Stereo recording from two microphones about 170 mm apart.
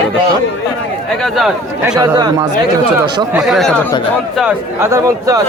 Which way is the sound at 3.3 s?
Centre (ahead or behind).